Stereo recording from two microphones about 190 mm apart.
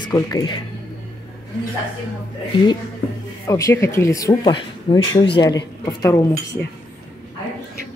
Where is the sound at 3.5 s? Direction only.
15° left (ahead or behind).